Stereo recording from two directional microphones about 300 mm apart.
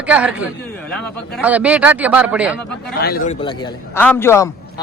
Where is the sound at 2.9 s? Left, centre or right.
Left.